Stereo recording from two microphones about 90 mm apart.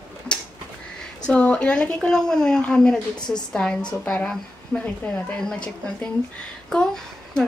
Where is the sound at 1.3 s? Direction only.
15° left (ahead or behind).